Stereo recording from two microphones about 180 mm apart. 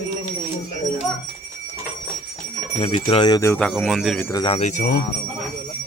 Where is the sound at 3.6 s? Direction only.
5° left (ahead or behind).